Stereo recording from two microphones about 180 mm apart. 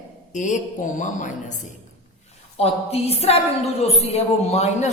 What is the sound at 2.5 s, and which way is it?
A woman's voice, 35° left (ahead or behind).